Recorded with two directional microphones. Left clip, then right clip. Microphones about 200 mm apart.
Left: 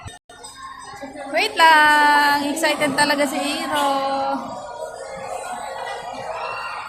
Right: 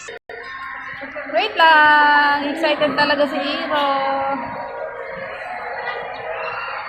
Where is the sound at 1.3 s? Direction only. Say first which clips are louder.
Right 1 dB; 15° left (ahead or behind).